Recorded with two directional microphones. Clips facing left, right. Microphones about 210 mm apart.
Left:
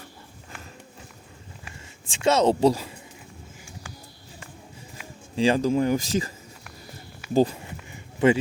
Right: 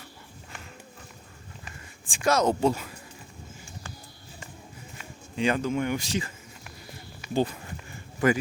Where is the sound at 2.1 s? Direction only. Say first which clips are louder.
Left 3 dB; 25° left (ahead or behind).